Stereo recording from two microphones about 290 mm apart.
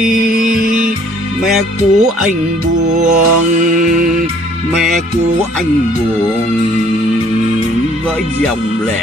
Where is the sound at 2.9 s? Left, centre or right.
Right.